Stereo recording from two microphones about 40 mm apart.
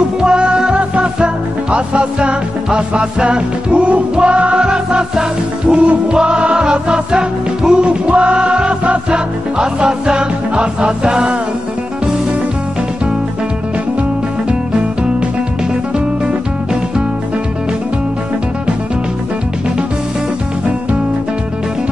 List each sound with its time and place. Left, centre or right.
0.2 s music: right
4.6 s music: centre
5.7 s music: right